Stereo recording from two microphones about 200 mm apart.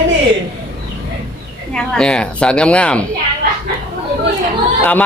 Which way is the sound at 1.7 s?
5° left (ahead or behind).